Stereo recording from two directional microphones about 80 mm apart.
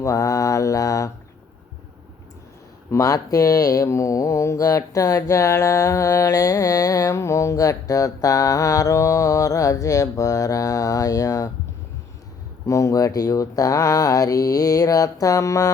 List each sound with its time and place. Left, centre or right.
0.0 s mantra: left
2.9 s speech: left
12.6 s speech: left